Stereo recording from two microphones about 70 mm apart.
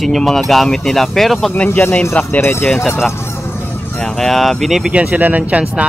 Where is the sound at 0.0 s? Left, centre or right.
Centre.